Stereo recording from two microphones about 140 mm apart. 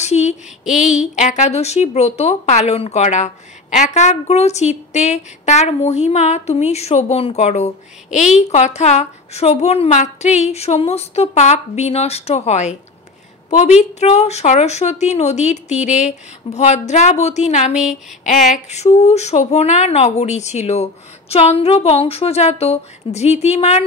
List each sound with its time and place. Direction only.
0.0 s female singing: 55° left (ahead or behind)
0.7 s a sound: 5° right (ahead or behind)
1.1 s a woman's voice: 55° left (ahead or behind)